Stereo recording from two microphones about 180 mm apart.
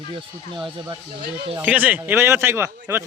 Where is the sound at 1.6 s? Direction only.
10° right (ahead or behind).